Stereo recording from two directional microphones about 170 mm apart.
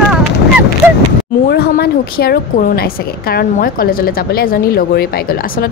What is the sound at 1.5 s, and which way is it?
A woman's voice, 70° left (ahead or behind).